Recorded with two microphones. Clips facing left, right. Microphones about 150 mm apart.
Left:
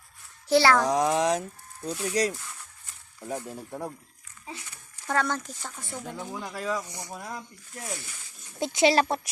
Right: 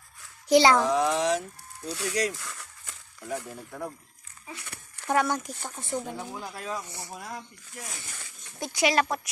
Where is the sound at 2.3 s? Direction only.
90° right.